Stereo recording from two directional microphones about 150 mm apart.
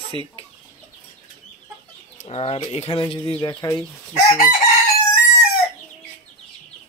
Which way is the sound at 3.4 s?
25° left (ahead or behind).